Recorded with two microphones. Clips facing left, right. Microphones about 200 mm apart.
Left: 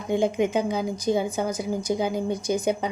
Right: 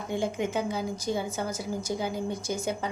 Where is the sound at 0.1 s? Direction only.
20° left (ahead or behind).